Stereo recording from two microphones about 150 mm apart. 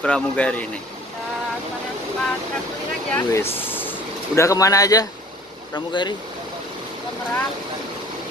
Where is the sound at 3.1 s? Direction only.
15° left (ahead or behind).